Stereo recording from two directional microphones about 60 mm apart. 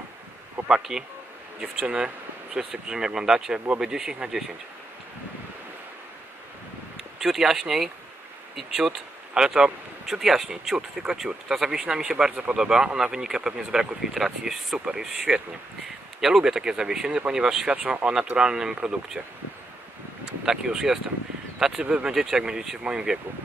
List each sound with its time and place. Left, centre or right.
0.6 s speech: right
1.6 s speech: centre
7.2 s speech: centre
20.4 s speech: centre